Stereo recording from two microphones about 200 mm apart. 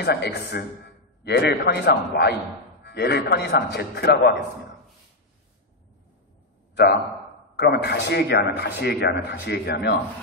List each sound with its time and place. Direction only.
0.0 s a man's voice: 55° left (ahead or behind)
6.7 s a sound: 55° left (ahead or behind)
7.5 s a man's voice: 55° left (ahead or behind)